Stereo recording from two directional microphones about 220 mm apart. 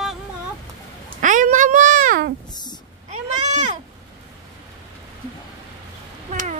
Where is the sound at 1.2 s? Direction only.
35° right (ahead or behind).